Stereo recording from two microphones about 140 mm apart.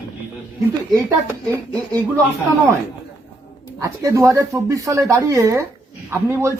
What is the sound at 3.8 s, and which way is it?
A man's voice, 25° right (ahead or behind).